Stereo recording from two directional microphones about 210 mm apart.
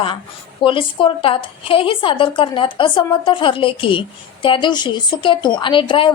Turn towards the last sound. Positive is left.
turn(degrees=25)  # may be behind; listen again after turning